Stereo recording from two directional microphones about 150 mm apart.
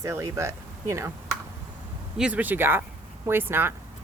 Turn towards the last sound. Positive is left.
turn(degrees=-15)  # may be behind; listen again after turning